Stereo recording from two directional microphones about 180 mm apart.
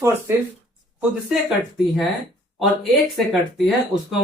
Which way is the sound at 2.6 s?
Centre (ahead or behind).